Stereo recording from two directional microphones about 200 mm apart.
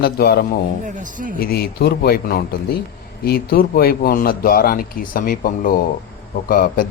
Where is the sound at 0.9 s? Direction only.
40° right (ahead or behind).